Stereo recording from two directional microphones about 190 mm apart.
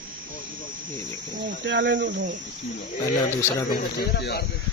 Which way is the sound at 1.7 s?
70° right (ahead or behind).